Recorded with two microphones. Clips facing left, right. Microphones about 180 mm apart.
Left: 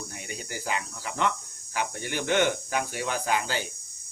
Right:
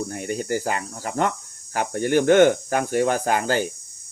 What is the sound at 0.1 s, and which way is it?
Speech, 50° right (ahead or behind).